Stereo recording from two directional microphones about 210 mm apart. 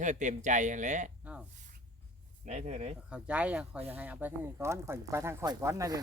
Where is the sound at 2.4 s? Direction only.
30° right (ahead or behind).